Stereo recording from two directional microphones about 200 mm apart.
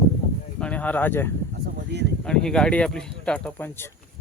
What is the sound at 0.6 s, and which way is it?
Speech, 5° left (ahead or behind).